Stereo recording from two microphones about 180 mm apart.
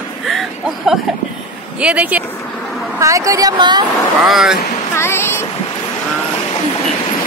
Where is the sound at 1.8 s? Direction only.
5° right (ahead or behind); by 3.8 s 25° right (ahead or behind).